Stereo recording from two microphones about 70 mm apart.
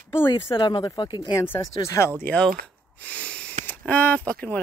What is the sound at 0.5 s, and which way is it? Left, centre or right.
Speech, left.